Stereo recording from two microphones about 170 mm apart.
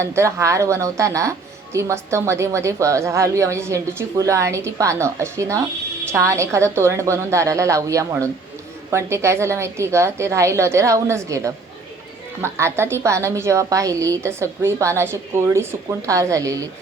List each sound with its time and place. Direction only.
0.0 s speech: 15° right (ahead or behind)